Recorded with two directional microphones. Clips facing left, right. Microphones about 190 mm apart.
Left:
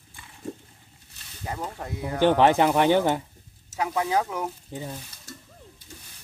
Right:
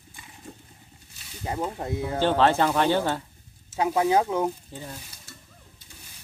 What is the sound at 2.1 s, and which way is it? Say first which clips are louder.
Speech: left 3 dB; 15° left (ahead or behind).